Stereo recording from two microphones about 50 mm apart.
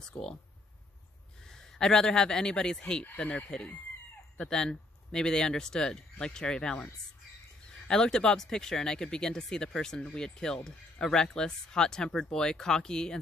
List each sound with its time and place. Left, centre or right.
0.0 s speech: centre
1.5 s speech: centre
7.9 s speech: centre